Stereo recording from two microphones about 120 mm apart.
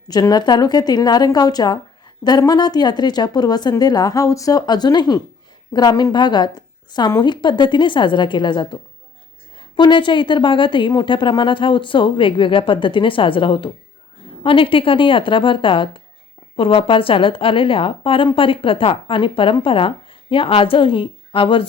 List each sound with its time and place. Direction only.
0.1 s a woman's voice: 35° left (ahead or behind)